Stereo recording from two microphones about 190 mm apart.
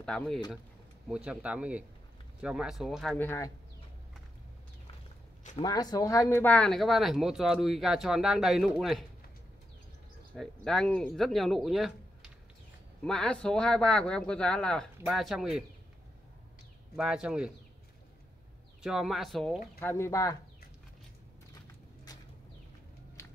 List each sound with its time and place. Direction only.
0.0 s speech: 5° left (ahead or behind)
3.2 s speech: 15° left (ahead or behind)
5.6 s speech: 20° left (ahead or behind); by 9.0 s centre (ahead or behind)
10.3 s speech: 5° left (ahead or behind)
13.0 s speech: 5° left (ahead or behind)
16.9 s speech: 5° right (ahead or behind)
18.8 s speech: 5° right (ahead or behind)
19.8 s speech: 10° left (ahead or behind)